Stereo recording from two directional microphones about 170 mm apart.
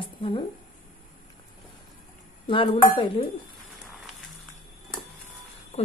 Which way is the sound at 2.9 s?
30° left (ahead or behind).